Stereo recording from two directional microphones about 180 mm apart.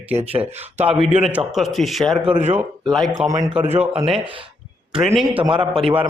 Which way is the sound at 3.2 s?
20° right (ahead or behind).